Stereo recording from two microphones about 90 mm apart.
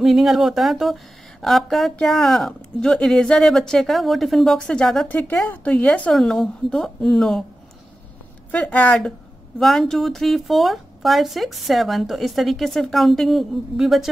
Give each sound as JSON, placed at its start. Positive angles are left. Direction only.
{"t": 0.0, "sound": "speech", "side_deg": -5}
{"t": 5.0, "sound": "a woman's voice", "side_deg": 15}
{"t": 6.1, "sound": "speech", "side_deg": 5}
{"t": 8.5, "sound": "a woman's voice", "side_deg": 15}